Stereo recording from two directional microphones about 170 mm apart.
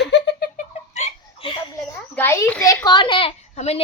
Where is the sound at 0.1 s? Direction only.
70° left (ahead or behind).